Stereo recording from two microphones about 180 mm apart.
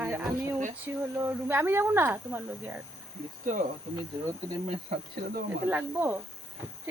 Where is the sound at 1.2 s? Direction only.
10° right (ahead or behind).